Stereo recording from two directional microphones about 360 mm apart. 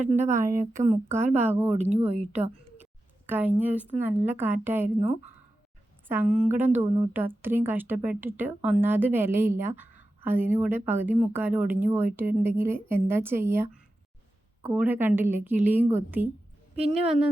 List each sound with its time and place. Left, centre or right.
0.0 s speech: centre
0.3 s speech: centre
1.7 s speech: centre
3.2 s a woman's voice: centre
4.9 s speech: centre
6.1 s a woman's voice: centre
16.7 s speech: centre